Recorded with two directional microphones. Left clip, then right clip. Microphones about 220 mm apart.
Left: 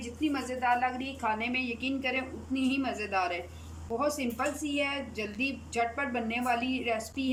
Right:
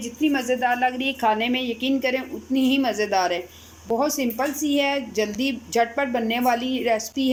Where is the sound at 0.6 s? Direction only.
25° right (ahead or behind).